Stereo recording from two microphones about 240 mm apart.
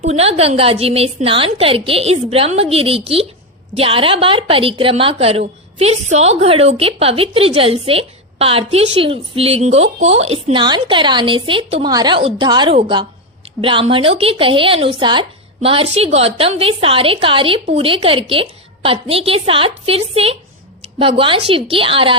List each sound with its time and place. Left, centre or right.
0.0 s a woman's voice: right